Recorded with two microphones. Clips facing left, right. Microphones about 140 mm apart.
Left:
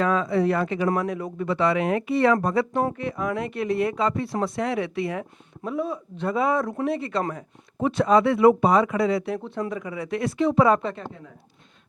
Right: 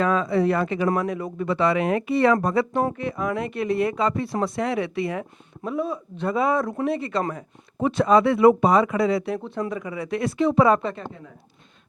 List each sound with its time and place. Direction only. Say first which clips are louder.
0.0 s speech: right 1 dB; 15° right (ahead or behind)